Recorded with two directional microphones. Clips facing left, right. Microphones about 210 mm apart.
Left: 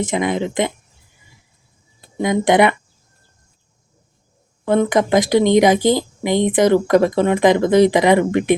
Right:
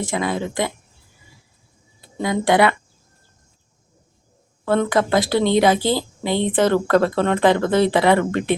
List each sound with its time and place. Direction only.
0.0 s speech: 20° left (ahead or behind)
2.1 s speech: 20° left (ahead or behind)
4.6 s speech: 15° left (ahead or behind)